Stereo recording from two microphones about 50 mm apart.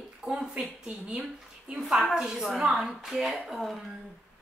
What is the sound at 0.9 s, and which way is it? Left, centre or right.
Speech, right.